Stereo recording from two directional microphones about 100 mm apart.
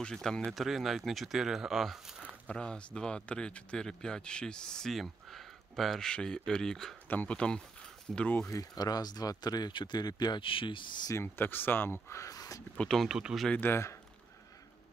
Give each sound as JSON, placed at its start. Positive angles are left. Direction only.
{"t": 0.0, "sound": "speech", "side_deg": 5}
{"t": 2.4, "sound": "speech", "side_deg": 10}
{"t": 8.5, "sound": "speech", "side_deg": 40}
{"t": 11.3, "sound": "speech", "side_deg": 20}
{"t": 12.7, "sound": "speech", "side_deg": 5}
{"t": 13.5, "sound": "speech", "side_deg": 20}